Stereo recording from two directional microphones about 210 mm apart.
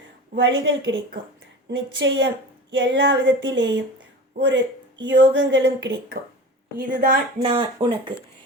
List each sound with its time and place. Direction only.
0.3 s speech: 65° right (ahead or behind)
6.7 s a woman's voice: 45° right (ahead or behind)
7.4 s speech: 25° right (ahead or behind)